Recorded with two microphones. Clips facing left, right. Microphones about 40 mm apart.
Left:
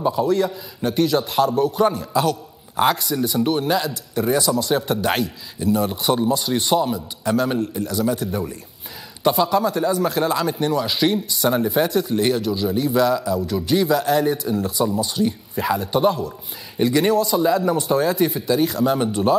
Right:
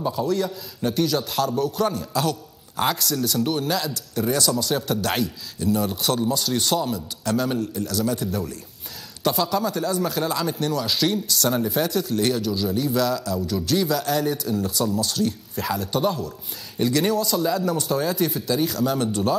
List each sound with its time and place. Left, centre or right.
0.0 s speech: centre